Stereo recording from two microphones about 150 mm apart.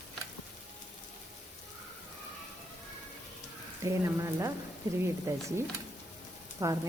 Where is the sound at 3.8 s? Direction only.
20° right (ahead or behind).